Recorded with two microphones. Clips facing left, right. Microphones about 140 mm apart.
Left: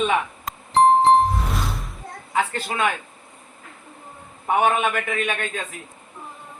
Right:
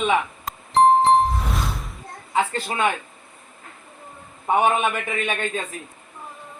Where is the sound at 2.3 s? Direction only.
20° right (ahead or behind).